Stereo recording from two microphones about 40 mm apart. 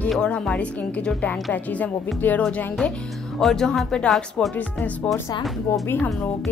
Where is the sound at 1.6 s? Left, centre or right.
Left.